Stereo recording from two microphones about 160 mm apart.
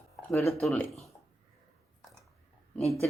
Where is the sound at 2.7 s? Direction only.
10° left (ahead or behind).